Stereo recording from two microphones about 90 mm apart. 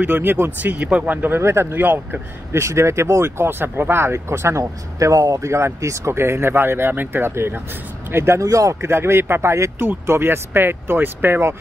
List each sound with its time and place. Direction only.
0.0 s speech: 25° right (ahead or behind)